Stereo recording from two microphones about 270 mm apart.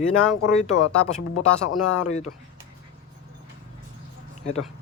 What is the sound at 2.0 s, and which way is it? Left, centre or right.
Speech, left.